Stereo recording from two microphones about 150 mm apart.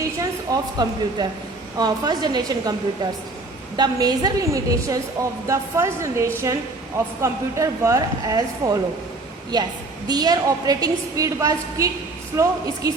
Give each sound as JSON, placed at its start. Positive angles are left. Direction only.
{"t": 0.2, "sound": "a woman's voice", "side_deg": -25}